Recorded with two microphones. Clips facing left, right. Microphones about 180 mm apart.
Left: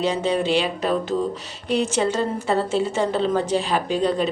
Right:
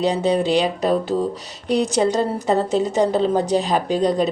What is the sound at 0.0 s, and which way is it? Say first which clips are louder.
A woman's voice: right 3 dB; 35° right (ahead or behind).